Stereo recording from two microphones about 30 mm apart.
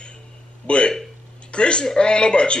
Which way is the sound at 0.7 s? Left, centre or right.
Left.